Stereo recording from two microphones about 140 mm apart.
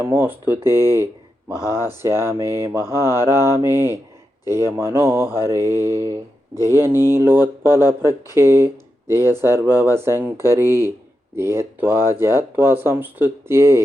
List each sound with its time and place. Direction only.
0.0 s speech: 15° right (ahead or behind)
1.5 s speech: 25° left (ahead or behind)
1.9 s speech: 20° right (ahead or behind)